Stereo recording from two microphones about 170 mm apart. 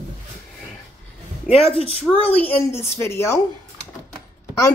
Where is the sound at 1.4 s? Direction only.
35° left (ahead or behind).